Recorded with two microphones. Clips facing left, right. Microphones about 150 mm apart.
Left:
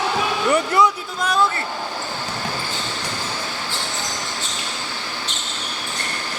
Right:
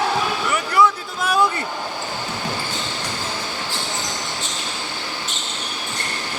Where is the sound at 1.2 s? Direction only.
10° right (ahead or behind).